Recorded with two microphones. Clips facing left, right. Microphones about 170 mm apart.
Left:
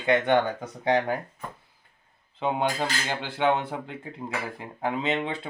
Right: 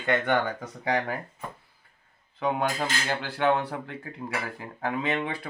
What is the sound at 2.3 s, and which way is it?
Speech, 20° left (ahead or behind).